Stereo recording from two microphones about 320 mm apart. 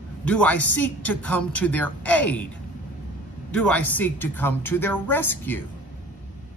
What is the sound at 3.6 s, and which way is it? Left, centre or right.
Speech, centre.